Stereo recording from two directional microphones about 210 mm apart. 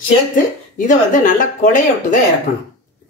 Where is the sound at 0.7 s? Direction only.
40° left (ahead or behind).